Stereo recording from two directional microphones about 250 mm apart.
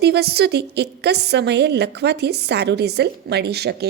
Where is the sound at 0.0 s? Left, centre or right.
Right.